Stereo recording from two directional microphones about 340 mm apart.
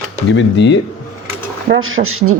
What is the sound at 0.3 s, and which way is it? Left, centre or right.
Speech, left.